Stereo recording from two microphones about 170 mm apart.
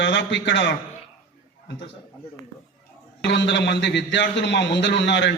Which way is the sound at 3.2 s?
90° left.